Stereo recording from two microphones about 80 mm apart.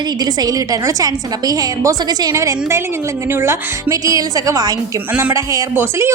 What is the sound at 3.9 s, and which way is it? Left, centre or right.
A woman's voice, right.